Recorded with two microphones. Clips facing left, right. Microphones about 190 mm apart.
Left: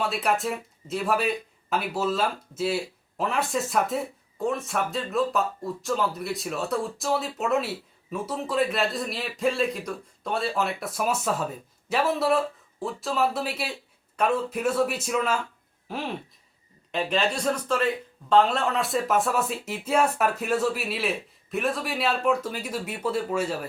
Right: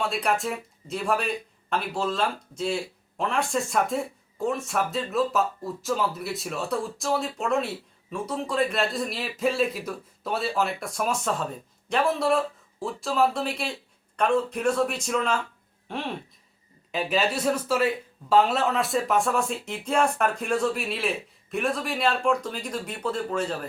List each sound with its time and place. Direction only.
0.0 s speech: centre (ahead or behind)